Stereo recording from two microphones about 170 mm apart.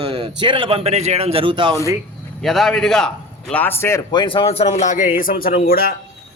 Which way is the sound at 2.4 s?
Centre (ahead or behind).